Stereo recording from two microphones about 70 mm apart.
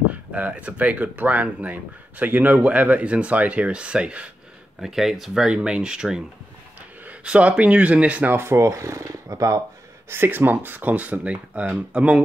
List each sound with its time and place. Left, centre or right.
0.1 s speech: centre
4.8 s speech: centre; by 8.4 s right
8.4 s speech: right
10.0 s speech: right; by 12.2 s centre